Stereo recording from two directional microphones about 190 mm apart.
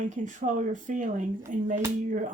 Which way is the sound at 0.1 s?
40° right (ahead or behind).